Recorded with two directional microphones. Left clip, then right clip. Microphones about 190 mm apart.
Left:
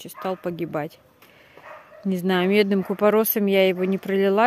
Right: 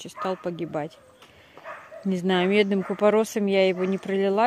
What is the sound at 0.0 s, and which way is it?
Speech, 10° left (ahead or behind).